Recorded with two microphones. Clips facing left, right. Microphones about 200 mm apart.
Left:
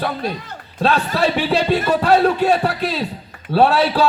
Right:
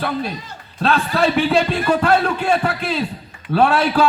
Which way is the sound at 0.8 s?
40° left (ahead or behind).